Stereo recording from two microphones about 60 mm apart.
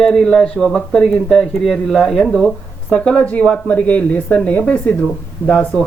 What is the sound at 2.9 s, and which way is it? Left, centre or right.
Speech, centre.